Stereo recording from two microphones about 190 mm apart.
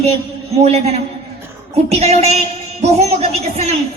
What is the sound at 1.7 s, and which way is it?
Child singing, 35° right (ahead or behind).